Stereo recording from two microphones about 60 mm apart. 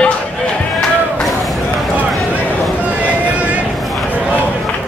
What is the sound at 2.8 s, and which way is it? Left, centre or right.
Vehicle, right.